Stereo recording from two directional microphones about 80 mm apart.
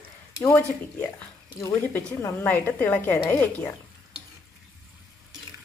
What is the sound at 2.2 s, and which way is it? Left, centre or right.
Speech, left.